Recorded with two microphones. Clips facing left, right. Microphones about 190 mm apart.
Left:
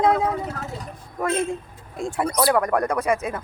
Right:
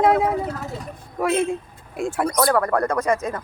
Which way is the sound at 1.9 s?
5° right (ahead or behind).